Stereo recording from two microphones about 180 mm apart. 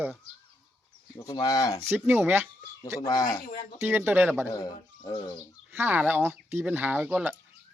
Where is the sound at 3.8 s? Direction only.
10° right (ahead or behind).